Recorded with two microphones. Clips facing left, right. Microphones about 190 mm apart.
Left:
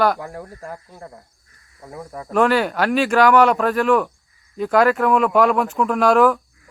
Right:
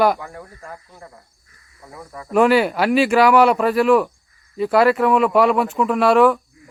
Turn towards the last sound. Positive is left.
turn(degrees=0)  # may be behind; listen again after turning